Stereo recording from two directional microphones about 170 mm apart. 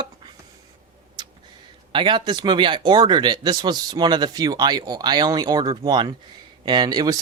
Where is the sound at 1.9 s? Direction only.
30° right (ahead or behind).